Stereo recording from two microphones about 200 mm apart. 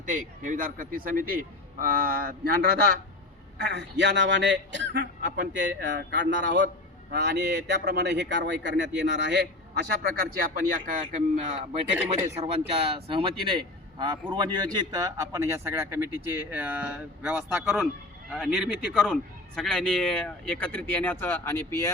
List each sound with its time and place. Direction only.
0.0 s a man's voice: 40° right (ahead or behind); by 21.9 s 15° left (ahead or behind)